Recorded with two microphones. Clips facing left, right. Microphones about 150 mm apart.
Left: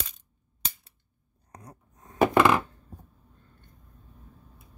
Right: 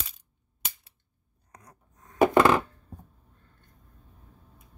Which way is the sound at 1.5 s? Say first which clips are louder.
Left 6 dB; 30° left (ahead or behind).